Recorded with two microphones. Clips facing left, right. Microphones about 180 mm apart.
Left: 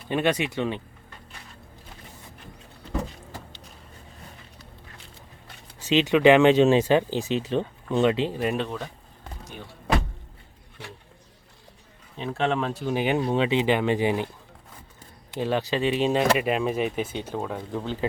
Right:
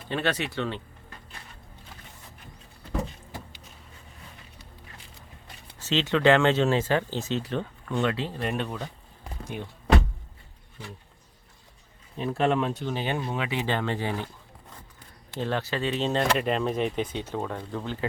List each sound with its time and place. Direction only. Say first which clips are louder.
0.1 s speech: left 4 dB; 15° left (ahead or behind)
5.8 s speech: left 4 dB; 15° left (ahead or behind)
8.4 s speech: left 4 dB; 5° left (ahead or behind)
12.1 s speech: right 1 dB; 5° right (ahead or behind); by 14.3 s 15° left (ahead or behind)
15.4 s speech: left 4 dB; 15° left (ahead or behind)
17.7 s speech: left 3 dB; 15° left (ahead or behind)